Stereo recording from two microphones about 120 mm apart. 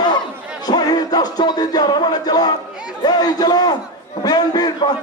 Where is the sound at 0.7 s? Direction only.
35° left (ahead or behind).